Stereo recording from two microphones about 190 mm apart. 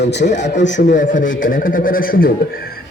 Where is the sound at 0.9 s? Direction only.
45° left (ahead or behind).